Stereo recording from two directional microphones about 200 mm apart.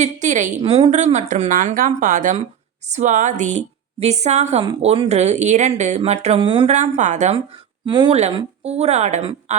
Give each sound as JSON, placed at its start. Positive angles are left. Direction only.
{"t": 0.0, "sound": "speech", "side_deg": -40}
{"t": 7.9, "sound": "speech", "side_deg": -25}